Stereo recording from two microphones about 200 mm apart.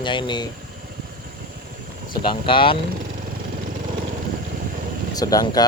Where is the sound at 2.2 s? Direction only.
25° left (ahead or behind).